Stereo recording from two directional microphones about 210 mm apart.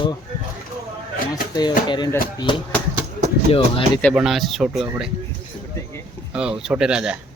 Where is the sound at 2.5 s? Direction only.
25° left (ahead or behind).